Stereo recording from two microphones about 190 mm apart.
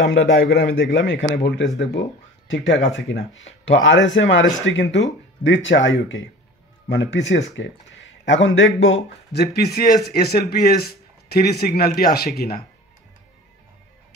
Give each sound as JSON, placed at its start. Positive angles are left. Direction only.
{"t": 0.0, "sound": "a man's voice", "side_deg": 70}